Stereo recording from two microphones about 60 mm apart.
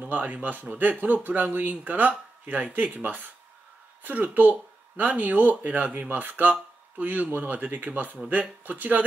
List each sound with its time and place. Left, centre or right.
0.0 s speech: right